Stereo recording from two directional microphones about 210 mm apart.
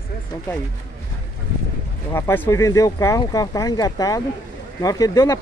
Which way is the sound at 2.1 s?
10° left (ahead or behind).